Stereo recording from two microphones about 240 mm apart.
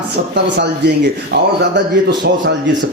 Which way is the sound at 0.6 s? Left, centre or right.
Right.